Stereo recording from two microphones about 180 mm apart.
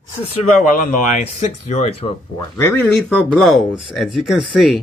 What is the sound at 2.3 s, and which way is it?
Speech, 15° left (ahead or behind).